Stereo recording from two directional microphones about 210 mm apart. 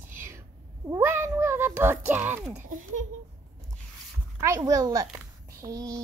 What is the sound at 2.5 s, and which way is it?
Speech, 35° right (ahead or behind).